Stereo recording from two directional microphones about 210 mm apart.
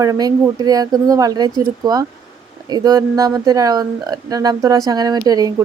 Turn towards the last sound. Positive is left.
turn(degrees=-15)  # may be behind; listen again after turning